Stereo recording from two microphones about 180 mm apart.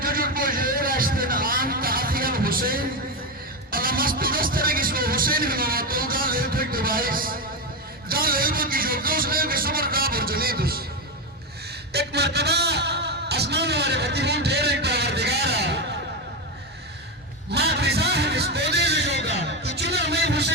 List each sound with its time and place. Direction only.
0.0 s vehicle: 55° right (ahead or behind)
3.7 s music: 55° right (ahead or behind)
8.0 s speech: 55° right (ahead or behind)
11.9 s music: 65° right (ahead or behind)
17.5 s a sound: 65° right (ahead or behind)